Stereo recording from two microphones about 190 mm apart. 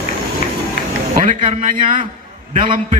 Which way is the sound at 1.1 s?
40° right (ahead or behind).